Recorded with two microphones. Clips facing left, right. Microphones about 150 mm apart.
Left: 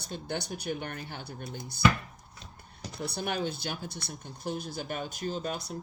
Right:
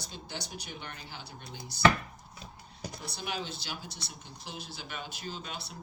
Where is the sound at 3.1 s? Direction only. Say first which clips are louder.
Left 6 dB; 55° left (ahead or behind).